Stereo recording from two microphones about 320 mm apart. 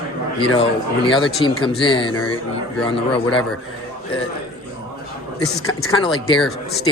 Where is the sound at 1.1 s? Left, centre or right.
Centre.